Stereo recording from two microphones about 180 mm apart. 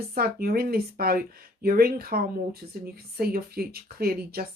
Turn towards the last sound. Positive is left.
turn(degrees=-55)  # may be behind; listen again after turning